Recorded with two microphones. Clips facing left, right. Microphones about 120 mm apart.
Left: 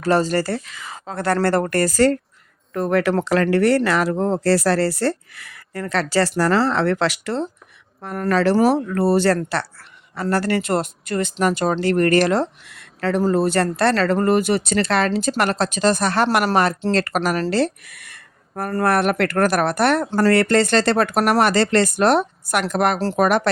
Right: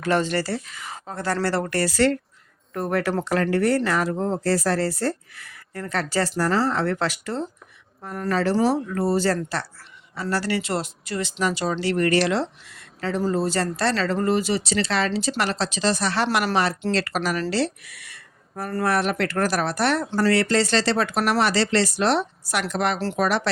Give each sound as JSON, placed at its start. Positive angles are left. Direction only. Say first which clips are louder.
{"t": 0.0, "sound": "speech", "louder": "left 4 dB", "side_deg": 35}
{"t": 0.6, "sound": "speech", "louder": "left 2 dB", "side_deg": 90}
{"t": 2.7, "sound": "speech", "louder": "left 5 dB", "side_deg": 90}
{"t": 8.0, "sound": "speech", "louder": "left 5 dB", "side_deg": 65}
{"t": 10.2, "sound": "speech", "louder": "left 5 dB", "side_deg": 50}
{"t": 12.6, "sound": "speech", "louder": "left 6 dB", "side_deg": 65}